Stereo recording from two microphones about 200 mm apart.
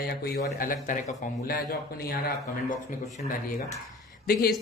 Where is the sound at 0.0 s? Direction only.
50° left (ahead or behind).